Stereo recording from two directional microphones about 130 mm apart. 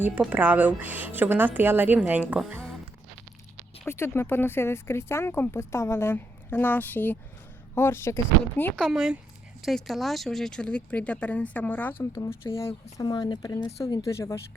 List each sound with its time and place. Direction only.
0.0 s a woman's voice: 10° right (ahead or behind)
3.8 s speech: 20° left (ahead or behind)
8.8 s speech: 5° right (ahead or behind); by 11.9 s 10° left (ahead or behind)
12.1 s speech: 25° left (ahead or behind)